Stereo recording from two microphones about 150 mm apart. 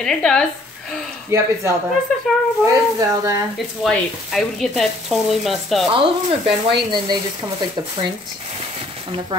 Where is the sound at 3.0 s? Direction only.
20° right (ahead or behind).